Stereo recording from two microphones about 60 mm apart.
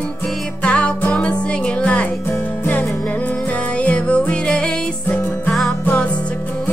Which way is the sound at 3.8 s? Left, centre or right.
Centre.